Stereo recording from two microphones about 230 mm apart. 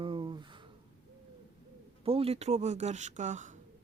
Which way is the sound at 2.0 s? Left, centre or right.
Right.